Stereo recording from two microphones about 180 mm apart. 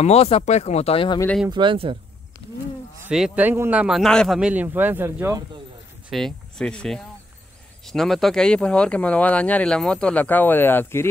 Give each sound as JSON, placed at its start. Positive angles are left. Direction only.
{"t": 0.0, "sound": "speech", "side_deg": 35}
{"t": 1.5, "sound": "speech", "side_deg": -25}
{"t": 3.1, "sound": "speech", "side_deg": -5}
{"t": 6.0, "sound": "speech", "side_deg": 0}